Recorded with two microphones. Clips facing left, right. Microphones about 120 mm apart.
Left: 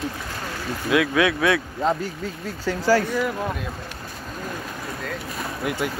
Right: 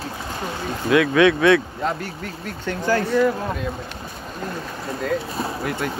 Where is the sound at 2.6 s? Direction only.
5° left (ahead or behind).